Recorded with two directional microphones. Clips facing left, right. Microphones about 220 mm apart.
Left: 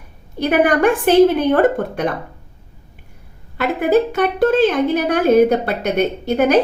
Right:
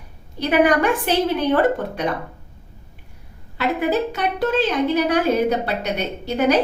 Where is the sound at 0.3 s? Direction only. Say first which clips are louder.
Left 2 dB; 50° left (ahead or behind).